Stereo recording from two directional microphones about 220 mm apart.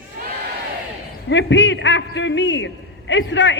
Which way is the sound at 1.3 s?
55° left (ahead or behind).